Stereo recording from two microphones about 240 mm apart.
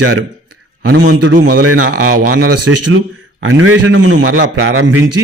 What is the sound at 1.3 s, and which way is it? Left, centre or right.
Speech, right.